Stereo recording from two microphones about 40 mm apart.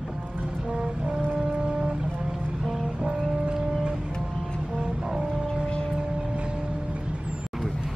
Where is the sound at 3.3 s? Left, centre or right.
Right.